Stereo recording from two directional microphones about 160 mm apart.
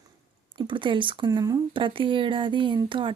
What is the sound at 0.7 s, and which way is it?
Speech, 30° right (ahead or behind).